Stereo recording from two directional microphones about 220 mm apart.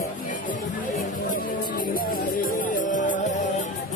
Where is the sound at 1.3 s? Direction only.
40° left (ahead or behind).